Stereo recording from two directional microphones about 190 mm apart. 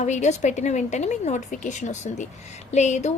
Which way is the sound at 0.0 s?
40° left (ahead or behind).